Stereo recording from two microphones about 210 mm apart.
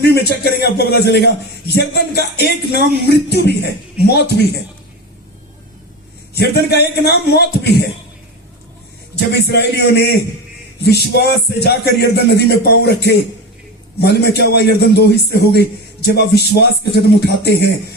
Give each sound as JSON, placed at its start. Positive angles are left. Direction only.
{"t": 0.0, "sound": "a man's voice", "side_deg": 50}
{"t": 6.3, "sound": "a man's voice", "side_deg": 50}
{"t": 9.3, "sound": "a man's voice", "side_deg": 50}